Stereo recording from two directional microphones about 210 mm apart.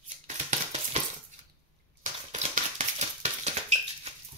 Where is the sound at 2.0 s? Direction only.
35° right (ahead or behind).